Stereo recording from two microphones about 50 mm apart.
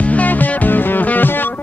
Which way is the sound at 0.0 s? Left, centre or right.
Left.